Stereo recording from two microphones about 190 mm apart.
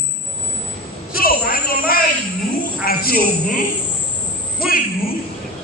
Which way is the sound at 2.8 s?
50° left (ahead or behind).